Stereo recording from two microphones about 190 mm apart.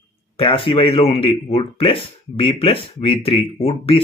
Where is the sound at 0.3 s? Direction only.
25° left (ahead or behind).